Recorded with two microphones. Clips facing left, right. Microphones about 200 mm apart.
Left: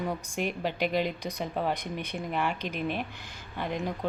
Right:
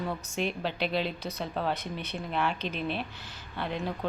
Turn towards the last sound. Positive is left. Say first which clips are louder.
# left 1 dB
turn(degrees=15)  # may be behind; listen again after turning